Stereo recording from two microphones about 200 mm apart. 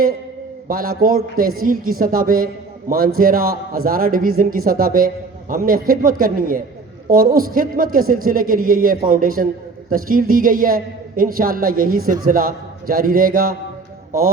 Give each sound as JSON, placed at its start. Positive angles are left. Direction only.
{"t": 0.7, "sound": "a man's voice", "side_deg": -45}